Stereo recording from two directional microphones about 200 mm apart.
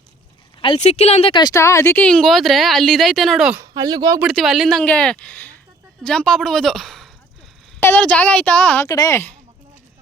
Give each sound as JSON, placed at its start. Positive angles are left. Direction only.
{"t": 0.6, "sound": "speech", "side_deg": 30}
{"t": 3.6, "sound": "speech", "side_deg": -20}
{"t": 4.2, "sound": "speech", "side_deg": 0}